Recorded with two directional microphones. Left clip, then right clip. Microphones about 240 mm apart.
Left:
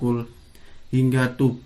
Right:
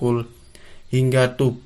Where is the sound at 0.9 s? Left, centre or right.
Right.